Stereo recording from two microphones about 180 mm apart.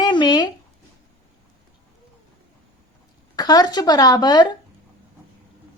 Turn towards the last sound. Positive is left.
turn(degrees=20)  # may be behind; listen again after turning